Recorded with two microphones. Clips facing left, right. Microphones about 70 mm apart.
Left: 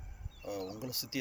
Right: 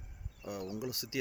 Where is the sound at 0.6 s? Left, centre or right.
Centre.